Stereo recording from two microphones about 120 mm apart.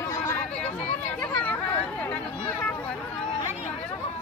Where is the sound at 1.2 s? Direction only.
15° left (ahead or behind).